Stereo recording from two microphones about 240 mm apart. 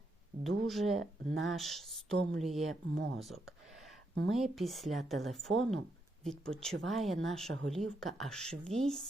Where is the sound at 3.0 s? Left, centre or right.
Right.